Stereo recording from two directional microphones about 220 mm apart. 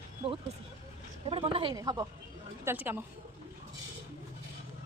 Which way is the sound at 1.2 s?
25° right (ahead or behind).